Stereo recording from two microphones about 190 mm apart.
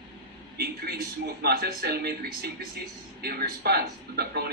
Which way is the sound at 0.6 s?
55° right (ahead or behind).